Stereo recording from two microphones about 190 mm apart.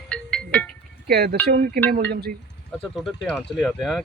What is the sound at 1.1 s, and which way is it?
Speech, 55° right (ahead or behind).